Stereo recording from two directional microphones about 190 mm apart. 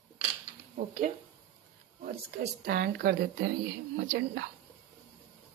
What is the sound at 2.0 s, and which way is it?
A woman's voice, 55° right (ahead or behind).